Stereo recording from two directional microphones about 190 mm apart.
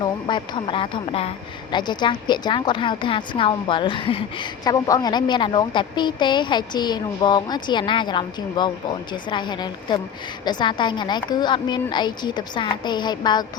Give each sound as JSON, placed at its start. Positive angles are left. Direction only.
{"t": 0.0, "sound": "a woman's voice", "side_deg": 25}